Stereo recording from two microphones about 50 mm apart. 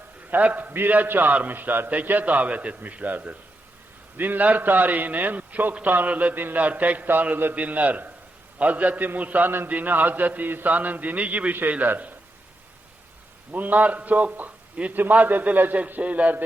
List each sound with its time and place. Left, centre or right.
0.3 s a man's voice: right
13.5 s a man's voice: right